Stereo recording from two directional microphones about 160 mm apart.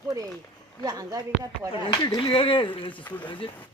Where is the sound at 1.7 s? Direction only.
35° left (ahead or behind).